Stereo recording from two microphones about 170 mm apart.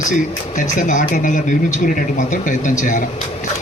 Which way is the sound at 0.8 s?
50° left (ahead or behind).